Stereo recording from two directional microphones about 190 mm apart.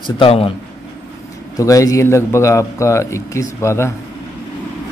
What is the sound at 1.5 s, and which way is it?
Speech, 15° left (ahead or behind).